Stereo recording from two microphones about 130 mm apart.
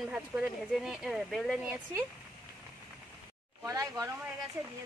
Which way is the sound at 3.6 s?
25° right (ahead or behind).